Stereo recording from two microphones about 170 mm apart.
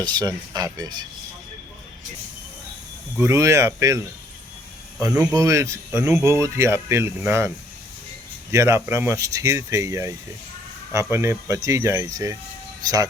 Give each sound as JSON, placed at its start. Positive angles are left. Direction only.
{"t": 0.0, "sound": "speech", "side_deg": -25}
{"t": 3.2, "sound": "speech", "side_deg": -15}
{"t": 5.3, "sound": "speech", "side_deg": -20}
{"t": 8.5, "sound": "speech", "side_deg": -15}